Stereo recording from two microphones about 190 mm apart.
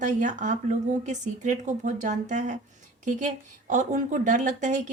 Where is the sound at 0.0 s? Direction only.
40° right (ahead or behind).